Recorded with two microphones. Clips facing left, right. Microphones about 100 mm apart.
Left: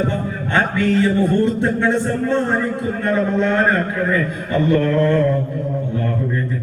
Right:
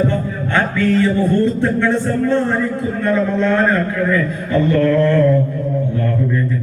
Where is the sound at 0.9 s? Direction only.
20° left (ahead or behind).